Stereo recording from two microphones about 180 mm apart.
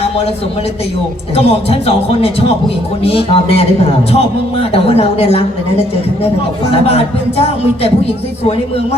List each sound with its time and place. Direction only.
1.4 s speech: 35° left (ahead or behind)
4.7 s speech: 35° left (ahead or behind)